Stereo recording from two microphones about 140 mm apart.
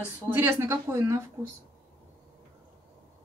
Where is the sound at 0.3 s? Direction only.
15° right (ahead or behind).